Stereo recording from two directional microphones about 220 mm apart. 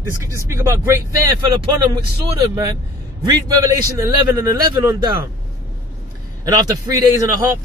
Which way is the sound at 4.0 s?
15° right (ahead or behind).